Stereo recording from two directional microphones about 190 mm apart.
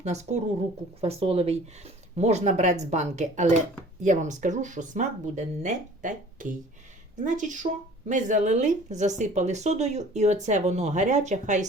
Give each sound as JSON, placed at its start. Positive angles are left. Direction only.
{"t": 0.0, "sound": "speech", "side_deg": -35}